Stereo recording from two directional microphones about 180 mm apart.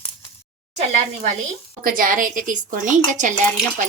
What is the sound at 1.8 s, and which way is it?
Speech, 50° right (ahead or behind).